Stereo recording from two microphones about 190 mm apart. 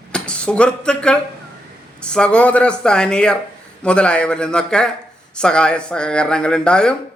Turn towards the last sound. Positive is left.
turn(degrees=5)  # may be behind; listen again after turning